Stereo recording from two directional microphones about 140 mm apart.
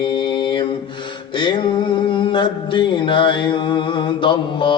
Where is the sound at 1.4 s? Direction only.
35° left (ahead or behind).